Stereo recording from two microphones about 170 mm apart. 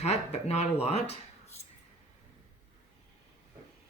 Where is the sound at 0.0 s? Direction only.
40° left (ahead or behind).